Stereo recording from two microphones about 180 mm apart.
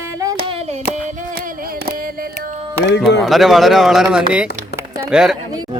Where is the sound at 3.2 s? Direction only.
Centre (ahead or behind).